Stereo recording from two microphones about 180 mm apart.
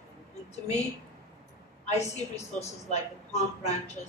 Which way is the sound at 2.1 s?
40° left (ahead or behind).